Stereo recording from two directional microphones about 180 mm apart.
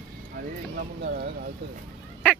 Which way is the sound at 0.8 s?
55° right (ahead or behind).